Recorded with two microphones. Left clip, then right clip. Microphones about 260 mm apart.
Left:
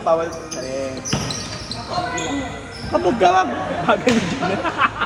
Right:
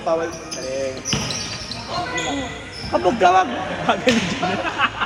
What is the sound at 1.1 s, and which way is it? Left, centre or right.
Basketball bounce, centre.